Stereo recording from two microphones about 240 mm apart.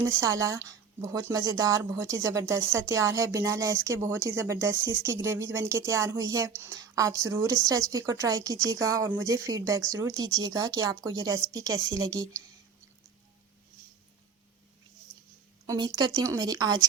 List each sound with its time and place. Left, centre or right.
0.0 s a woman's voice: centre
15.6 s a woman's voice: centre